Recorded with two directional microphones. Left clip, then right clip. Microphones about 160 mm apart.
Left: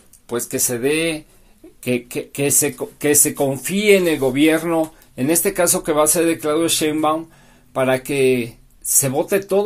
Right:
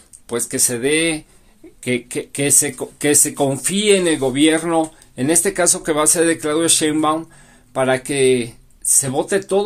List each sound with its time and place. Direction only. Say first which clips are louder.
0.3 s speech: right 1 dB; 15° right (ahead or behind)
3.7 s speech: left 2 dB; 10° right (ahead or behind)